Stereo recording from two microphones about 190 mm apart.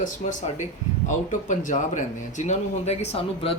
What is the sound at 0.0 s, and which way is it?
A man's voice, 40° left (ahead or behind).